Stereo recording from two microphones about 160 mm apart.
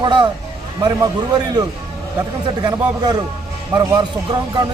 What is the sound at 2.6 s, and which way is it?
Speech, 25° right (ahead or behind).